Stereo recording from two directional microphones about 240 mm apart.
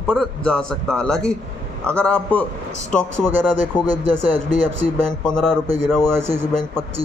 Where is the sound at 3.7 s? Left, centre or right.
Centre.